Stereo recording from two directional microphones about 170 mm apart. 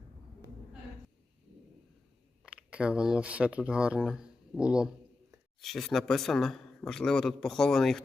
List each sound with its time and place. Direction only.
2.4 s a man's voice: 5° right (ahead or behind)